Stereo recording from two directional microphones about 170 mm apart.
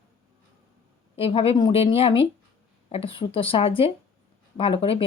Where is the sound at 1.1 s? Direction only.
35° left (ahead or behind).